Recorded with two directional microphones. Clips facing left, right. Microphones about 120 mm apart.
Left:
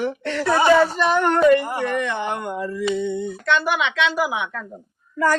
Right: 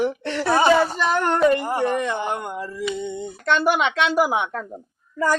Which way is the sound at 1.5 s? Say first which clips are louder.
Left 2 dB; 30° right (ahead or behind).